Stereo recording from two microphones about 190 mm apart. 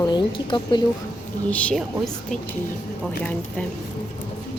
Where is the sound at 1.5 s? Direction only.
5° left (ahead or behind).